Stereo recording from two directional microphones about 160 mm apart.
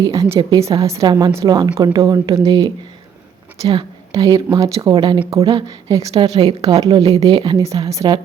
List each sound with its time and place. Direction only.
0.0 s a woman's voice: 20° right (ahead or behind)
3.6 s speech: 35° right (ahead or behind)
4.1 s a woman's voice: 20° right (ahead or behind)
6.3 s speech: 40° right (ahead or behind)
6.6 s a woman's voice: 25° right (ahead or behind)
7.6 s a woman's voice: 20° right (ahead or behind)